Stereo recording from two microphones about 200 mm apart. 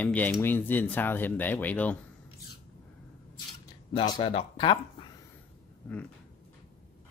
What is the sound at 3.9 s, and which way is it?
Speech, 25° left (ahead or behind).